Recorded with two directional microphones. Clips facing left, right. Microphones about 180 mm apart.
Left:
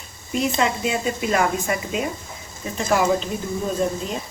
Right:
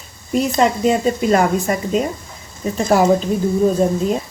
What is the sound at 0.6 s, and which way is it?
A woman's voice, 40° right (ahead or behind).